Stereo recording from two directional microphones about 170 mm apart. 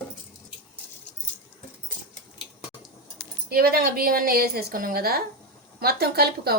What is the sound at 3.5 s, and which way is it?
A woman's voice, 65° right (ahead or behind).